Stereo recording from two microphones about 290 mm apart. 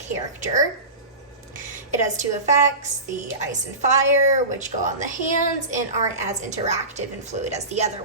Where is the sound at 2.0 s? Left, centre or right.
Right.